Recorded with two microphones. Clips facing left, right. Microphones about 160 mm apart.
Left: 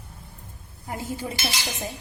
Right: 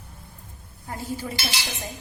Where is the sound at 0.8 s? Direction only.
15° left (ahead or behind).